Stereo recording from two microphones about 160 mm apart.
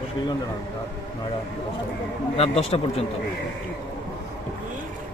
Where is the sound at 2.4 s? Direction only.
40° left (ahead or behind).